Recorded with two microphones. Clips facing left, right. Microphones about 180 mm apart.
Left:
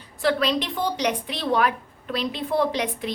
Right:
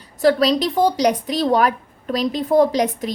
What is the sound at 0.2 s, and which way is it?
A woman's voice, 40° right (ahead or behind).